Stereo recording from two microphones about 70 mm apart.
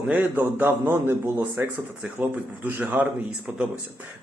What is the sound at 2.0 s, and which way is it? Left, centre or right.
Speech, centre.